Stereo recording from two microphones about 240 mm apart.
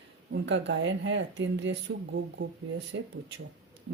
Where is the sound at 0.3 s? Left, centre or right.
Right.